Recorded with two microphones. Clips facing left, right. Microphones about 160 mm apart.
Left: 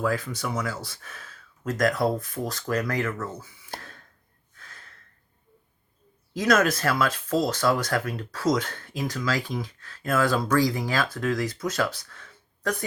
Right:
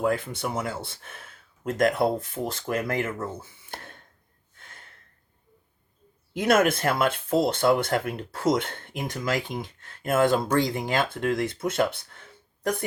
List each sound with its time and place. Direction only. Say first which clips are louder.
0.0 s speech: right 1 dB; 25° right (ahead or behind)
4.5 s gasp: even; 25° right (ahead or behind)
6.4 s speech: right 1 dB; 25° right (ahead or behind)